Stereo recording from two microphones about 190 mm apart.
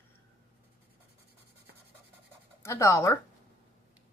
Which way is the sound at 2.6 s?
15° left (ahead or behind).